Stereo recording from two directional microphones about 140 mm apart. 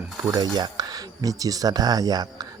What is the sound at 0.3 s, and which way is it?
Speech, 30° right (ahead or behind).